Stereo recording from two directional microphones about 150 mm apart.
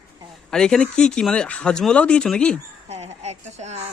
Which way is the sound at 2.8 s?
50° right (ahead or behind).